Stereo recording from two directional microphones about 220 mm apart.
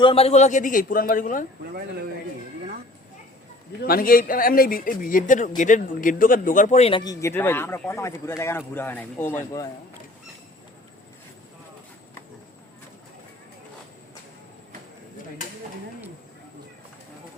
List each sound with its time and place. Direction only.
0.0 s speech: 25° left (ahead or behind)
3.8 s speech: 40° left (ahead or behind); by 9.6 s 15° left (ahead or behind)